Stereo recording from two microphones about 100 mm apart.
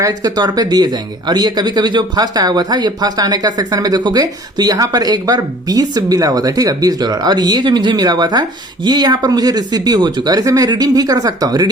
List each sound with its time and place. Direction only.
0.0 s speech: 40° right (ahead or behind)